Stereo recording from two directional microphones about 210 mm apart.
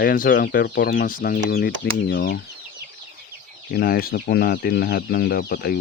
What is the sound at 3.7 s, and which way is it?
Speech, 45° left (ahead or behind).